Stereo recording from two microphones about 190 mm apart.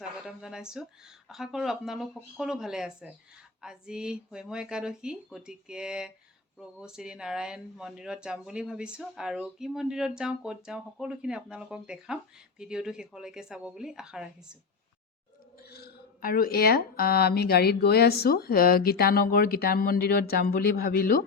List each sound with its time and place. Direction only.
0.3 s speech: 5° right (ahead or behind)
15.7 s a woman's voice: 50° left (ahead or behind)